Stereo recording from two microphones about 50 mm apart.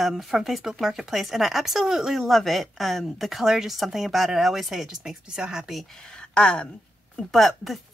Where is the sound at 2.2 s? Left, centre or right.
Centre.